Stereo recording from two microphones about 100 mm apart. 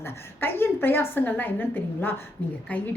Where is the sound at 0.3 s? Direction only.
20° left (ahead or behind).